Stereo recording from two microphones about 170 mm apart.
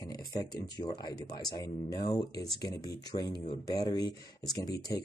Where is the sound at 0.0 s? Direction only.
20° left (ahead or behind).